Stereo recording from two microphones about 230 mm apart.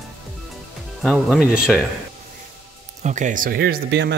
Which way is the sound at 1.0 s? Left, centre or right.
Centre.